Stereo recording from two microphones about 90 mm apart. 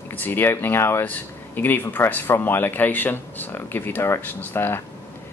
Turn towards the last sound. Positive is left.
turn(degrees=25)  # may be behind; listen again after turning